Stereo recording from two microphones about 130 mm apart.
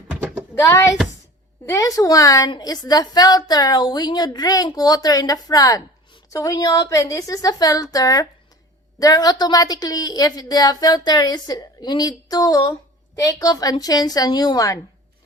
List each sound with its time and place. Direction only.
0.6 s a woman's voice: 20° left (ahead or behind)